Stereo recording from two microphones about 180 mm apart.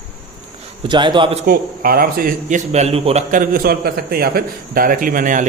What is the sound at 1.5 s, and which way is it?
A man's voice, 55° right (ahead or behind).